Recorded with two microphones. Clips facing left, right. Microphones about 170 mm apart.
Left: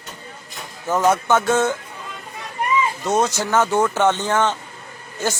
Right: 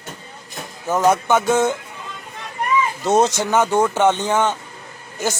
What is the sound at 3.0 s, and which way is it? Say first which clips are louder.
Speech: right 3 dB; 30° right (ahead or behind).